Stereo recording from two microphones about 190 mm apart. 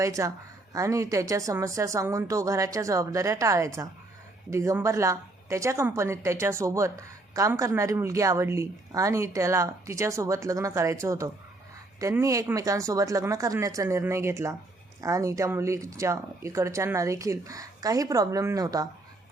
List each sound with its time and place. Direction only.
0.0 s a woman's voice: 15° right (ahead or behind)